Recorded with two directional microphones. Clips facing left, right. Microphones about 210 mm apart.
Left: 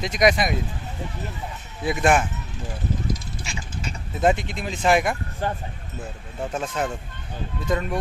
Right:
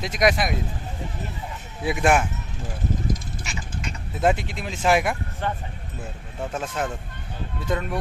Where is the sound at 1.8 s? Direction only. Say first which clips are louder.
Even; 5° right (ahead or behind).